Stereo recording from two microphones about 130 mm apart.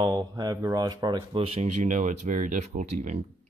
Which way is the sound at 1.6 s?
70° right (ahead or behind).